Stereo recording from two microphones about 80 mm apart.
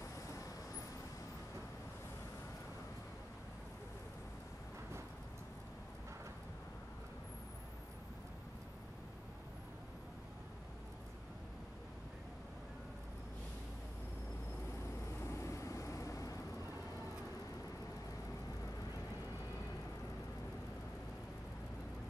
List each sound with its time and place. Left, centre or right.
15.1 s vehicle: left